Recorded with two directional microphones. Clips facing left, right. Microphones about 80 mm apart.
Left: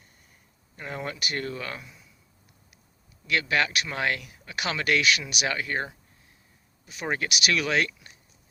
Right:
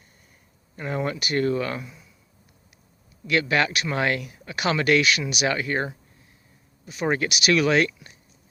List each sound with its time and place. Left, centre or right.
0.8 s speech: centre
1.2 s speech: centre
3.2 s speech: centre
7.2 s speech: centre